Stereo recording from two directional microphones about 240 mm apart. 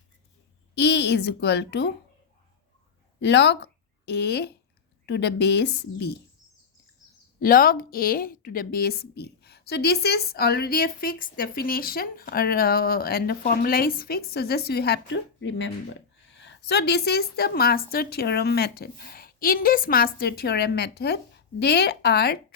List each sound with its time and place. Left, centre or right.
0.8 s a woman's voice: left
3.2 s a woman's voice: left
7.3 s a woman's voice: left